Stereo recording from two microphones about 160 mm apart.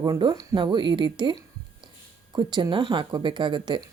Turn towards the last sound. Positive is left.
turn(degrees=-30)  # may be behind; listen again after turning